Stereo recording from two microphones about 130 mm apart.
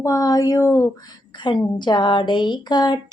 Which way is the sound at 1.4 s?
35° left (ahead or behind).